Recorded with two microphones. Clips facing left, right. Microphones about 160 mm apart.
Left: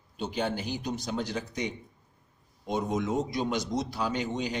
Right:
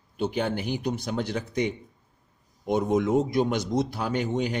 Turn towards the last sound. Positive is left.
turn(degrees=-55)  # may be behind; listen again after turning